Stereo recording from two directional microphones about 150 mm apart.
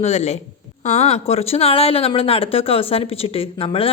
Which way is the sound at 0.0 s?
45° left (ahead or behind).